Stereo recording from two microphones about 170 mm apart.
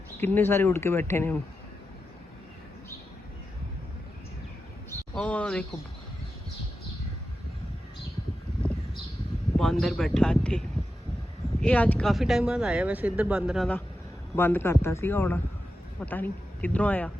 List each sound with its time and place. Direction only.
0.2 s speech: 10° left (ahead or behind)
4.9 s a sound: 5° left (ahead or behind)
9.6 s speech: 5° left (ahead or behind)
11.6 s speech: 10° left (ahead or behind)
14.3 s speech: 15° left (ahead or behind)